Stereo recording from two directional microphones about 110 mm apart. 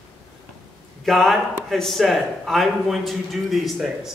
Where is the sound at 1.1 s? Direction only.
Centre (ahead or behind).